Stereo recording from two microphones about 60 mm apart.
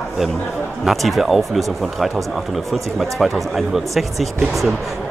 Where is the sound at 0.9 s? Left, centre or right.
Centre.